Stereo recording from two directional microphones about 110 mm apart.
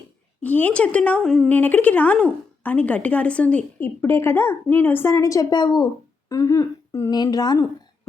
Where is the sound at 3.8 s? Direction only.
25° left (ahead or behind).